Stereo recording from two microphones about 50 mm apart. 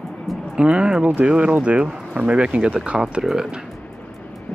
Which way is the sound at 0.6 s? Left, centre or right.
Right.